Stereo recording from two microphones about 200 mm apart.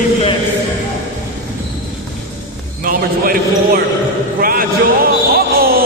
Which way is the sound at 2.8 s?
45° right (ahead or behind).